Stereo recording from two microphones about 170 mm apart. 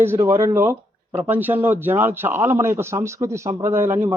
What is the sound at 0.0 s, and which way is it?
Speech, 15° right (ahead or behind).